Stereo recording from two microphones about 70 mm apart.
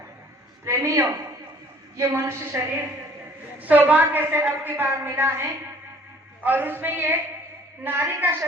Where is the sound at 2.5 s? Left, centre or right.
Right.